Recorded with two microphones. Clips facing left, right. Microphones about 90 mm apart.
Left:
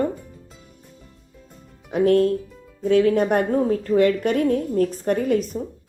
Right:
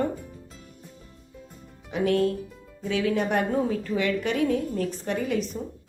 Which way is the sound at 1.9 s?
50° left (ahead or behind).